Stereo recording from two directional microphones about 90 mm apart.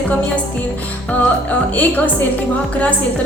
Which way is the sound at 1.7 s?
20° left (ahead or behind).